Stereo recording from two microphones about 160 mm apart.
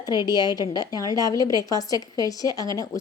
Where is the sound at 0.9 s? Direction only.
20° right (ahead or behind).